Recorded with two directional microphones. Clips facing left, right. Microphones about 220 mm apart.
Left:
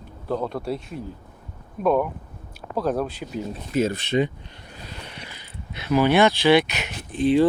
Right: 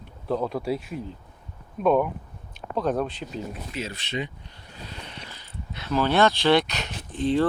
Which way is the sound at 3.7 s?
50° left (ahead or behind).